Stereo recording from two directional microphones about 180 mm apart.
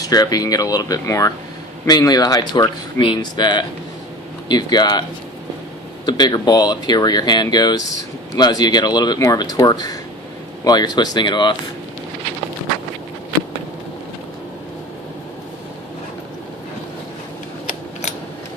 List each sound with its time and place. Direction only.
0.0 s speech: 20° left (ahead or behind)
6.1 s speech: 20° left (ahead or behind)